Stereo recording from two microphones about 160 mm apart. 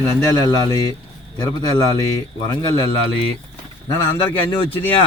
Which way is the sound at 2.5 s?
30° left (ahead or behind).